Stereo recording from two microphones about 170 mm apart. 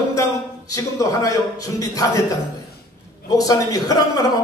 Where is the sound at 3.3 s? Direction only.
20° left (ahead or behind).